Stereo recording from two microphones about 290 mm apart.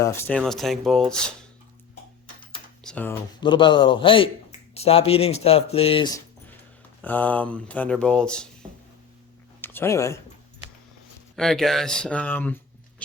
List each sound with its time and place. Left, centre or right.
0.0 s speech: centre
2.8 s a man's voice: centre
7.0 s speech: centre
9.6 s a sound: centre
11.3 s speech: centre